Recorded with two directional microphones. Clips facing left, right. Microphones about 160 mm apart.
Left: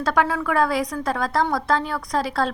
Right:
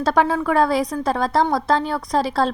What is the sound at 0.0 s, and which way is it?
Speech, 30° right (ahead or behind).